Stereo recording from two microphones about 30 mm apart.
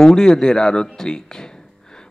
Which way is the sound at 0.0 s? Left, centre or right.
Left.